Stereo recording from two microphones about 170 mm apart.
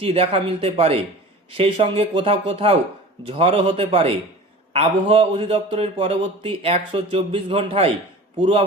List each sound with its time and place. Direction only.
0.0 s a man's voice: 35° right (ahead or behind)